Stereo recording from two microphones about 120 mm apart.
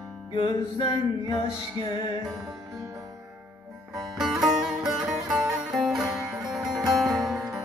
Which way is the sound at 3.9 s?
Centre (ahead or behind).